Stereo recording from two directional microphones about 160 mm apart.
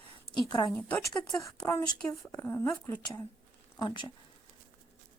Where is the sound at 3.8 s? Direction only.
30° left (ahead or behind).